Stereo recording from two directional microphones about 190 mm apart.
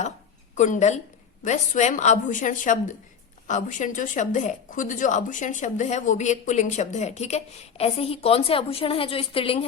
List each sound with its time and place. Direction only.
0.5 s a woman's voice: 40° left (ahead or behind)